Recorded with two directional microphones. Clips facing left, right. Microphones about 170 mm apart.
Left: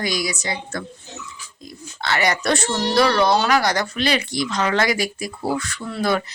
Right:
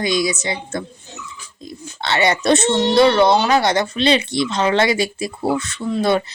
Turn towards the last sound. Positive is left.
turn(degrees=-25)  # may be behind; listen again after turning